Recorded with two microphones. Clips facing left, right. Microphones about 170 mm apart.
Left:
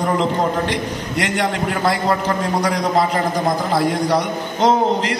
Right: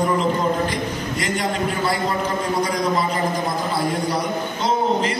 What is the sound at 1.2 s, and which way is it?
Speech, 85° left.